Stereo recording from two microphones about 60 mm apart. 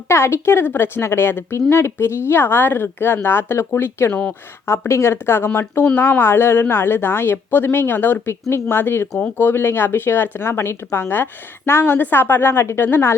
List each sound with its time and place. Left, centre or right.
0.1 s a woman's voice: left
4.1 s speech: centre
4.6 s a woman's voice: left
8.3 s a woman's voice: left